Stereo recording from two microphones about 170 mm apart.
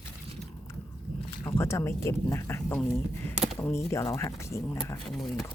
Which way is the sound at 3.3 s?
5° right (ahead or behind).